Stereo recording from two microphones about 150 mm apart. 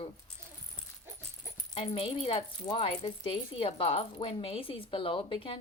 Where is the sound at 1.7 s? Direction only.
40° left (ahead or behind).